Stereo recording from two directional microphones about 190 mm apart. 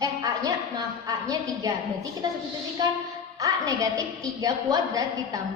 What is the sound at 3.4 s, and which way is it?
A woman's voice, 20° right (ahead or behind).